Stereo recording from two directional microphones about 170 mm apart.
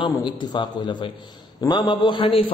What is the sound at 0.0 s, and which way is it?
A man's voice, 25° left (ahead or behind).